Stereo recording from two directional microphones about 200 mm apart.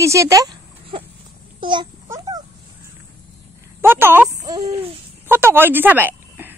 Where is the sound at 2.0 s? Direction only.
15° right (ahead or behind).